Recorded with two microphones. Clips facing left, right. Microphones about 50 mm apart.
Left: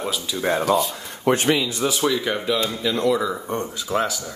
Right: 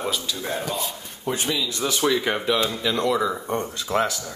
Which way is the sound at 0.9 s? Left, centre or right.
Left.